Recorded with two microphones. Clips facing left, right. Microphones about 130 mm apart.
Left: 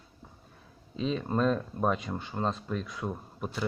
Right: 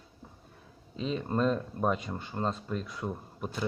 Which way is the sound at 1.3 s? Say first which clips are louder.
Even; centre (ahead or behind).